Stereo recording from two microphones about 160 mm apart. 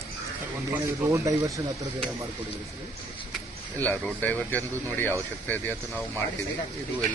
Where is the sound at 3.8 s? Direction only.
10° left (ahead or behind).